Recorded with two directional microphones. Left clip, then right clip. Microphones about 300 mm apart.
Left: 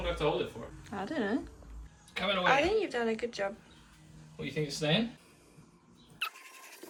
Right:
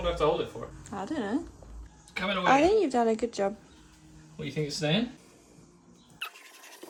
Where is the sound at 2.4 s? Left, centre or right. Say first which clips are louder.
Right 6 dB; centre.